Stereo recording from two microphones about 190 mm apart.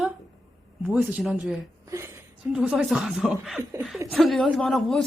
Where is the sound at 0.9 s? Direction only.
5° right (ahead or behind).